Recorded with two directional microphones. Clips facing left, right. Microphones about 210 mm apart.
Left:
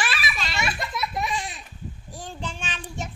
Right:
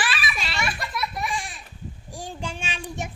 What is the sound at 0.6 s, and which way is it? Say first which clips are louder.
Baby laughter: left 1 dB; 20° left (ahead or behind).